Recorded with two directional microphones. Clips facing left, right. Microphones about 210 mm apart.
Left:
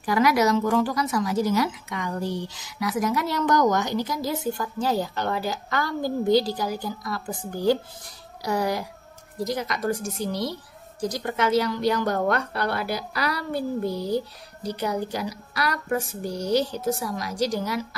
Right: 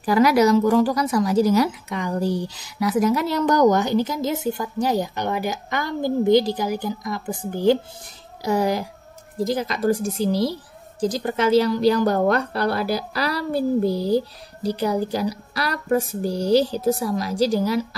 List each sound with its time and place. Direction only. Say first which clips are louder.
0.0 s a child's voice: right 4 dB; 35° right (ahead or behind)